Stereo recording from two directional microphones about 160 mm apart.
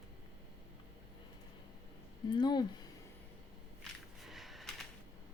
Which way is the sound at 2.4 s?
25° left (ahead or behind).